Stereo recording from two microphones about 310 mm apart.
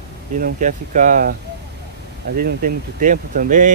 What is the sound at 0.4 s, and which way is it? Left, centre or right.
Speech, right.